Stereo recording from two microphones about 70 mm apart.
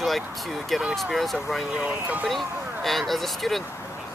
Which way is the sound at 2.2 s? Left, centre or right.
Centre.